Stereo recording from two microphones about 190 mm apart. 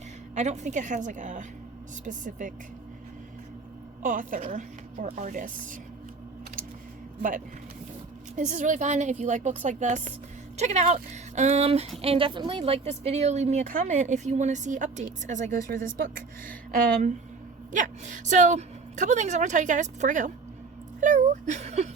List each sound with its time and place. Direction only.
0.3 s a woman's voice: 40° right (ahead or behind)
4.0 s a woman's voice: 45° right (ahead or behind)
7.2 s a woman's voice: 45° right (ahead or behind)